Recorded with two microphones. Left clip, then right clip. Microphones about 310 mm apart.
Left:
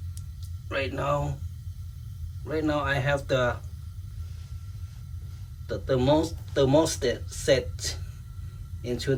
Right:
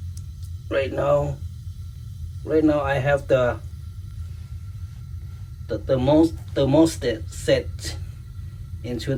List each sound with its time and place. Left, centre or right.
0.7 s speech: centre
2.4 s speech: centre
5.6 s speech: centre